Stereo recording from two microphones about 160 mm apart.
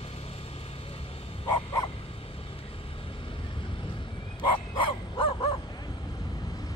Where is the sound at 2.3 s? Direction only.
35° left (ahead or behind).